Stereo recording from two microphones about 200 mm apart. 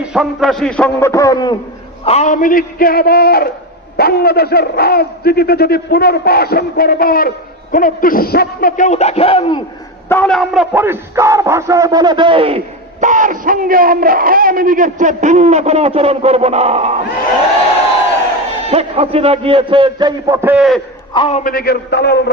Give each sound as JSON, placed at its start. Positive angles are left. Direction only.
{"t": 0.0, "sound": "a man's voice", "side_deg": 0}
{"t": 2.0, "sound": "a man's voice", "side_deg": 35}
{"t": 10.1, "sound": "speech", "side_deg": 5}
{"t": 18.7, "sound": "a man's voice", "side_deg": -30}
{"t": 21.1, "sound": "a man's voice", "side_deg": 30}
{"t": 21.5, "sound": "a man's voice", "side_deg": 50}